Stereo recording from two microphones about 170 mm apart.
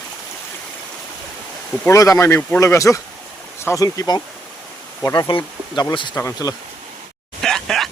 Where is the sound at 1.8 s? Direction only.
20° left (ahead or behind).